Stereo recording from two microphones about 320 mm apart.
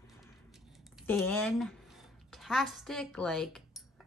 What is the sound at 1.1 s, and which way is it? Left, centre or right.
Speech, centre.